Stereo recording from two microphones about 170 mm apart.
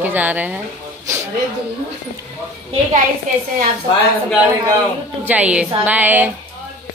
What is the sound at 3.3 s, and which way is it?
Speech, 50° right (ahead or behind).